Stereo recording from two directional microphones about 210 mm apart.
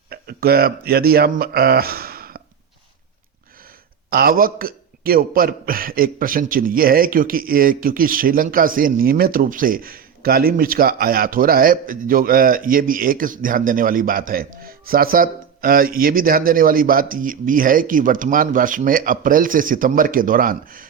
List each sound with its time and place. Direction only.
0.1 s speech: 50° right (ahead or behind)
4.1 s a man's voice: 45° right (ahead or behind)